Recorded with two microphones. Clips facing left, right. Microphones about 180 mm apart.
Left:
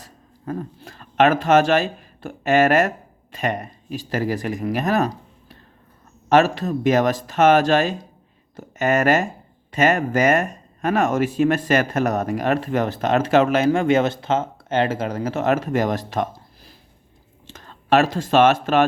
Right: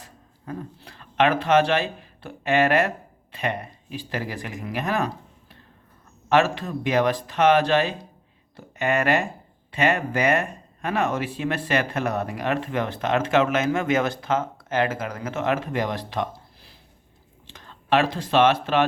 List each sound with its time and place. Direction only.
0.0 s speech: 45° left (ahead or behind)
6.2 s speech: 40° left (ahead or behind)